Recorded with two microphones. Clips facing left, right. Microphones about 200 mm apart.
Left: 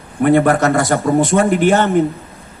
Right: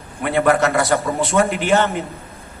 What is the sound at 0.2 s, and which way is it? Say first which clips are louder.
A man's voice: left 5 dB; 50° left (ahead or behind).